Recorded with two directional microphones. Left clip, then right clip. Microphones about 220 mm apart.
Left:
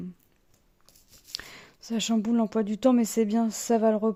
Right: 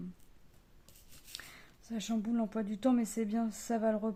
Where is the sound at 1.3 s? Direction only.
40° left (ahead or behind).